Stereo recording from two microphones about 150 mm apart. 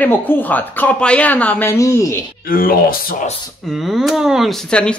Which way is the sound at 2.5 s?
70° left (ahead or behind).